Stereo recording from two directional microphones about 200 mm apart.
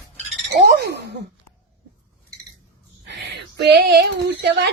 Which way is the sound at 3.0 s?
60° right (ahead or behind).